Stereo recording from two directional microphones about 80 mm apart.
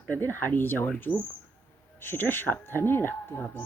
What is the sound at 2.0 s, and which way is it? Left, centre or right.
Speech, left.